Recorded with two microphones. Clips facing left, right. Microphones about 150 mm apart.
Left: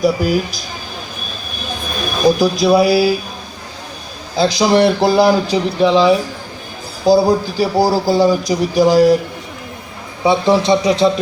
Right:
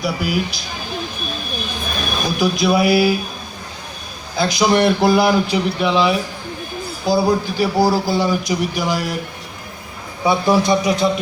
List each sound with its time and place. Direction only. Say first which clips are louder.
0.0 s speech: left 6 dB; 40° left (ahead or behind)
2.2 s speech: left 6 dB; 40° left (ahead or behind)
4.4 s speech: left 3 dB; 30° left (ahead or behind)
10.2 s speech: left 3 dB; 25° left (ahead or behind)